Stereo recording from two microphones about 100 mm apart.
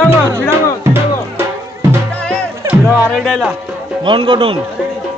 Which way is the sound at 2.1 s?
15° left (ahead or behind).